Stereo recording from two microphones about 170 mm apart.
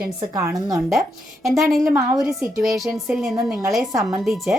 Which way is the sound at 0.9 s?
Centre (ahead or behind).